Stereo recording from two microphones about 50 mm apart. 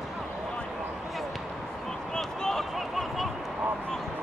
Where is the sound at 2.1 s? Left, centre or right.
Centre.